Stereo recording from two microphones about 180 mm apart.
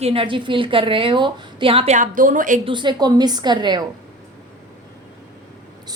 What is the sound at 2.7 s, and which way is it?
A woman's voice, 25° right (ahead or behind).